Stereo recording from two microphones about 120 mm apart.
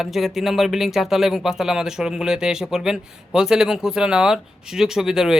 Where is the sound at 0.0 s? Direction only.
Centre (ahead or behind).